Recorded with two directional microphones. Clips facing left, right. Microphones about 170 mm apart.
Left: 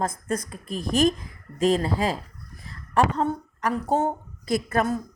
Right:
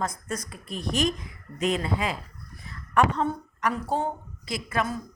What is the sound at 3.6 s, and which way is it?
A woman's voice, 45° left (ahead or behind).